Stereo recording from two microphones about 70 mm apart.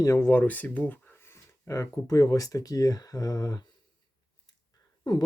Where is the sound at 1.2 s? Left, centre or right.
Left.